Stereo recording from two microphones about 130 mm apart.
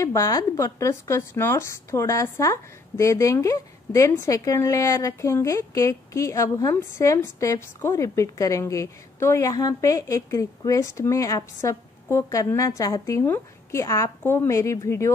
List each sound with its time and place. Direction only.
0.0 s speech: 25° left (ahead or behind)